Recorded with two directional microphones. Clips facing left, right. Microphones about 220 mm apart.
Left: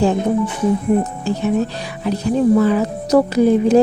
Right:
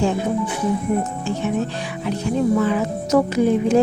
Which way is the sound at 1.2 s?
35° left (ahead or behind).